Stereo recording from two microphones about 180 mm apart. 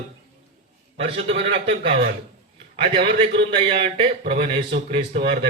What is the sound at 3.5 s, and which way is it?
A man's voice, 30° right (ahead or behind).